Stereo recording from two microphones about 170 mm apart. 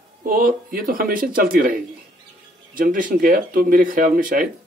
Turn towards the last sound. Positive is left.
turn(degrees=-55)  # may be behind; listen again after turning